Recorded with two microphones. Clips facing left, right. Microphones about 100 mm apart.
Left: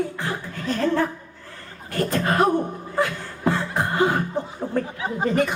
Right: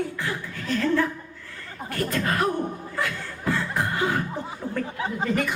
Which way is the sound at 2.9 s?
35° left (ahead or behind).